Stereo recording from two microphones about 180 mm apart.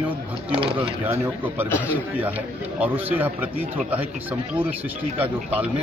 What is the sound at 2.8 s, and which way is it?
A man's voice, 10° right (ahead or behind).